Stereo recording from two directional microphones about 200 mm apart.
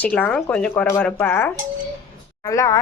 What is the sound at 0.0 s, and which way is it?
A woman's voice, 10° left (ahead or behind).